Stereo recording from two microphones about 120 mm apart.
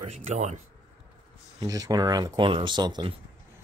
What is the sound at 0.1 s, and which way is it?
Speech, 80° right.